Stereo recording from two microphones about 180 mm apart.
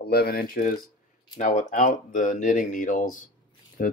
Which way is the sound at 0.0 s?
60° left (ahead or behind).